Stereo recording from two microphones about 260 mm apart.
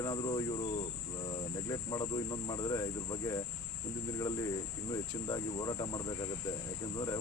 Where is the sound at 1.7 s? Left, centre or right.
Centre.